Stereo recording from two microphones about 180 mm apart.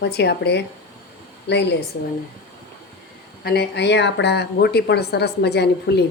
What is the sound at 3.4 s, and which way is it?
Speech, 65° left (ahead or behind).